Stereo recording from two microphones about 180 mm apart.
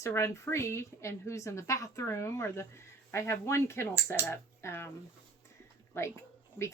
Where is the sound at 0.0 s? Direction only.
15° left (ahead or behind).